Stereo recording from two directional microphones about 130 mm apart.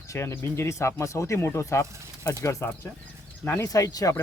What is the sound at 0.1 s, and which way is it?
Speech, 20° left (ahead or behind).